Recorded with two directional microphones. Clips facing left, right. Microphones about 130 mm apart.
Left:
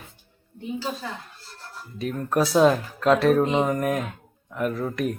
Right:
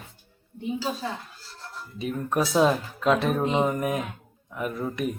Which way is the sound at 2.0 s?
Centre (ahead or behind).